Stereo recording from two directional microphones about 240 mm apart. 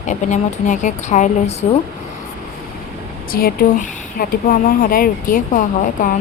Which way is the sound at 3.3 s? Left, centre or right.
Left.